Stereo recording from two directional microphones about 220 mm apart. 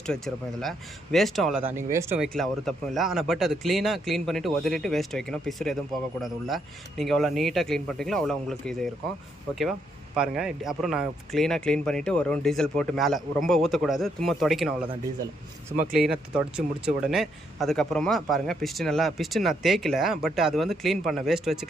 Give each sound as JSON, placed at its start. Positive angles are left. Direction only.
{"t": 0.0, "sound": "a man's voice", "side_deg": 0}
{"t": 10.2, "sound": "a man's voice", "side_deg": 0}
{"t": 15.7, "sound": "speech", "side_deg": -35}
{"t": 16.6, "sound": "a man's voice", "side_deg": -5}